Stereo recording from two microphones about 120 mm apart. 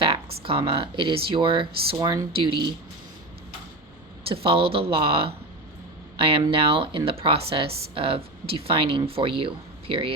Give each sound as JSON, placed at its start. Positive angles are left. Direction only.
{"t": 0.0, "sound": "speech", "side_deg": -50}
{"t": 4.3, "sound": "speech", "side_deg": -50}